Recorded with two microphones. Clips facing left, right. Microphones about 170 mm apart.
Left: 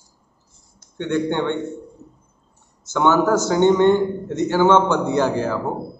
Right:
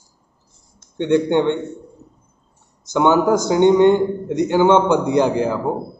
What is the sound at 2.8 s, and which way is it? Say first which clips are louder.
Speech: right 2 dB; 15° right (ahead or behind).